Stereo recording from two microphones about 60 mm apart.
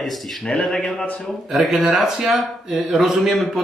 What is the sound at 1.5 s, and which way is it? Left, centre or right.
Speech, centre.